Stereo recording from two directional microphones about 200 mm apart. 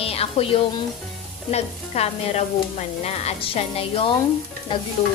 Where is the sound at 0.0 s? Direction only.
30° left (ahead or behind).